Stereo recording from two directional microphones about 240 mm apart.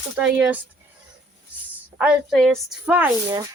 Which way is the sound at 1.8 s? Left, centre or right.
Centre.